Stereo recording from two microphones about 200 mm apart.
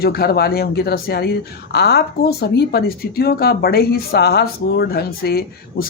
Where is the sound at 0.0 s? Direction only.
50° left (ahead or behind).